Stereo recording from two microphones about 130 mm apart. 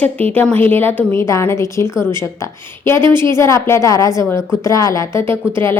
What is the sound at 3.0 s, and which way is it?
Speech, 35° right (ahead or behind).